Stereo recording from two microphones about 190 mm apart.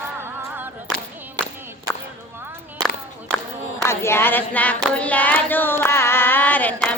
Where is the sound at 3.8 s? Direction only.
15° left (ahead or behind).